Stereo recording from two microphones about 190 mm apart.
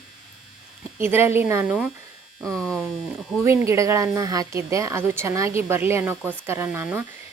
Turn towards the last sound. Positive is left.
turn(degrees=-10)  # may be behind; listen again after turning